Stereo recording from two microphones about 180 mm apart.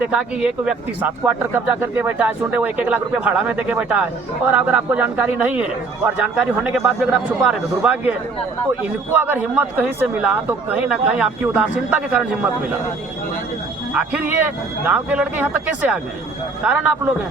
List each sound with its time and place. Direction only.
0.0 s a man's voice: 5° right (ahead or behind)
9.1 s speech: 10° right (ahead or behind)
13.9 s speech: 5° right (ahead or behind)